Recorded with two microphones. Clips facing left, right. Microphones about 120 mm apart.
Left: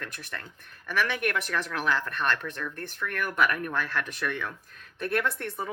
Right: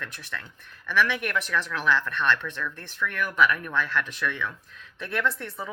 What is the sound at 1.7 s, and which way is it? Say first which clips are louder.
Speech: right 3 dB; 40° left (ahead or behind).